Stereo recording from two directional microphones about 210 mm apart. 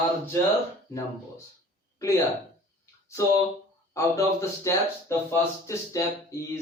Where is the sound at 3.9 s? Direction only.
15° left (ahead or behind).